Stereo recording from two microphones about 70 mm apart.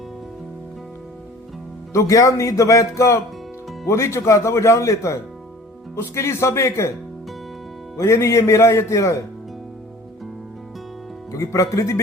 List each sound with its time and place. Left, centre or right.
1.9 s speech: left
7.9 s speech: left
11.3 s speech: left